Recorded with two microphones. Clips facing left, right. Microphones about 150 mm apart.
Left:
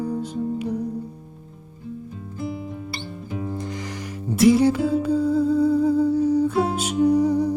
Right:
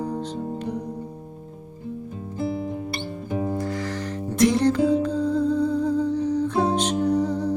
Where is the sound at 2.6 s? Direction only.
45° right (ahead or behind).